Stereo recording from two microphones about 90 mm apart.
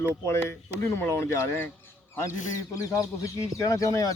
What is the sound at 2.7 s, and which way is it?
Speech, 35° left (ahead or behind).